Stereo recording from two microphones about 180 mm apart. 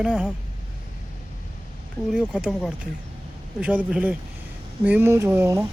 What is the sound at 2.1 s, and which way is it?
Speech, 5° right (ahead or behind).